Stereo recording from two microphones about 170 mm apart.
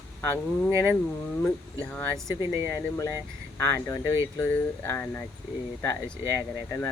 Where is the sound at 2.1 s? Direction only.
15° right (ahead or behind).